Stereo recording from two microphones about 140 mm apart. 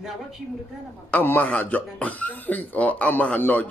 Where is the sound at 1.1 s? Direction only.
10° left (ahead or behind).